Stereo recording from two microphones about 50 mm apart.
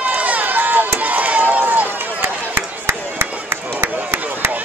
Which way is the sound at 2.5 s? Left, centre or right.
Right.